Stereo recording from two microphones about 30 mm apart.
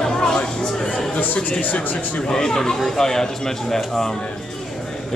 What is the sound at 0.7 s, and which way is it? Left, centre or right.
Speech, centre.